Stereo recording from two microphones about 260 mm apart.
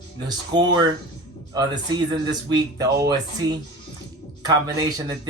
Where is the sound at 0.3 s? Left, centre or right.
Centre.